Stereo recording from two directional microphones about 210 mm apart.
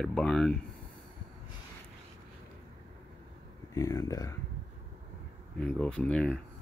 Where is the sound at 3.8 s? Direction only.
15° left (ahead or behind).